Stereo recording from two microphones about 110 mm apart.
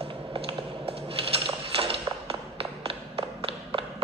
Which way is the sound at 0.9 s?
60° right (ahead or behind).